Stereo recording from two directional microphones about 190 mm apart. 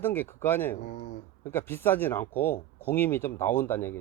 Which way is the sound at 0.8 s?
45° left (ahead or behind).